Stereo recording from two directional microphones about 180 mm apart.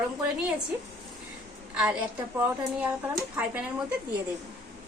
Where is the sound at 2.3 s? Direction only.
10° right (ahead or behind).